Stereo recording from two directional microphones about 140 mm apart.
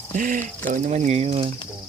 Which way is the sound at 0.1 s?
75° right (ahead or behind).